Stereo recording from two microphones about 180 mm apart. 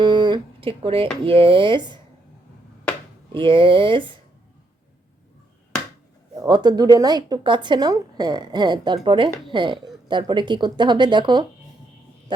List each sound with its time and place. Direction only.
0.0 s a sound: 25° right (ahead or behind)
1.2 s a woman's voice: 30° right (ahead or behind)
3.3 s a woman's voice: 30° right (ahead or behind)
6.4 s a woman's voice: 25° right (ahead or behind)